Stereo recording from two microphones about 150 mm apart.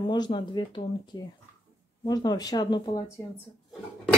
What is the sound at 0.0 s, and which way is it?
Speech, 30° left (ahead or behind).